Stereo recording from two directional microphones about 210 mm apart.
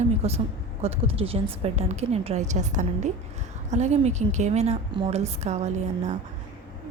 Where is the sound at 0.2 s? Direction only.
30° right (ahead or behind).